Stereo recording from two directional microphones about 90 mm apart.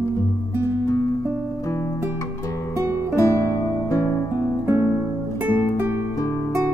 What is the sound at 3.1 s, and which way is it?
Music, 35° left (ahead or behind).